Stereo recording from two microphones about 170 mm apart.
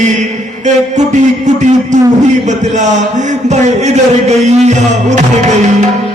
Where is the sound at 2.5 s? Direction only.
45° right (ahead or behind).